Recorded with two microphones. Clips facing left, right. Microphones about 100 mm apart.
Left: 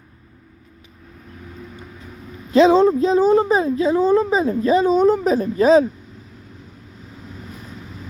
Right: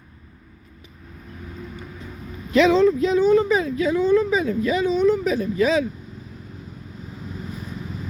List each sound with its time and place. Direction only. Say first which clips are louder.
2.5 s speech: left 3 dB; 30° left (ahead or behind)